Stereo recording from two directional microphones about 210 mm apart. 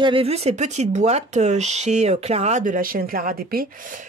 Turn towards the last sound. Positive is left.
turn(degrees=-45)  # may be behind; listen again after turning